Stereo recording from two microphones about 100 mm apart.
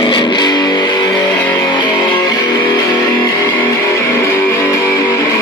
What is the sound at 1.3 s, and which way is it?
Music, 15° left (ahead or behind).